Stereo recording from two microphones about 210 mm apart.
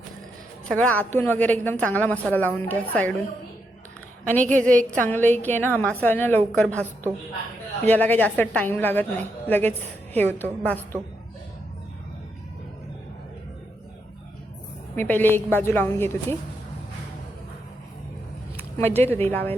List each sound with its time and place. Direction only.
0.7 s a woman's voice: 5° left (ahead or behind)
4.3 s a woman's voice: 5° left (ahead or behind)
14.9 s a woman's voice: 10° left (ahead or behind)
18.8 s a woman's voice: 10° left (ahead or behind)